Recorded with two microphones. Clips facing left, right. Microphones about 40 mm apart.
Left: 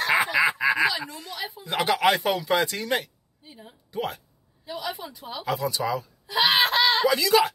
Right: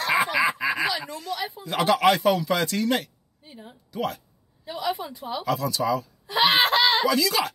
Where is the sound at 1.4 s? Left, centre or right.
Right.